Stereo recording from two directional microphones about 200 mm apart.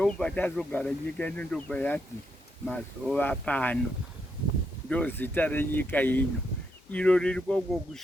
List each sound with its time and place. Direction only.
0.0 s speech: 5° left (ahead or behind)
4.9 s speech: 10° left (ahead or behind)